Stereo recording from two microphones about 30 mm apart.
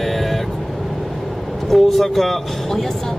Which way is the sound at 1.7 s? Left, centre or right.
Centre.